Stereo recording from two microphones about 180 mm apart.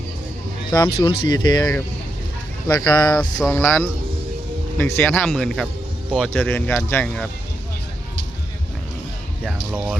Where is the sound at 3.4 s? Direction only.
10° left (ahead or behind).